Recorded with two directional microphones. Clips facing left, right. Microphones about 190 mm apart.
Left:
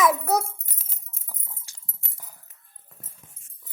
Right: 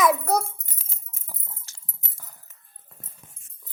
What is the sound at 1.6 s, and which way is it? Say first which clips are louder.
Dog: right 1 dB; 15° left (ahead or behind).